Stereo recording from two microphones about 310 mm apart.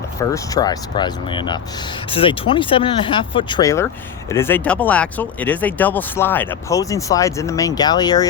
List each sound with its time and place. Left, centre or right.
0.2 s speech: centre